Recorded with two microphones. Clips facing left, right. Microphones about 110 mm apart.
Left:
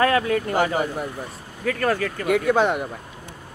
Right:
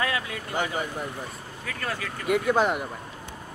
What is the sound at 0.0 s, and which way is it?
Speech, 50° left (ahead or behind).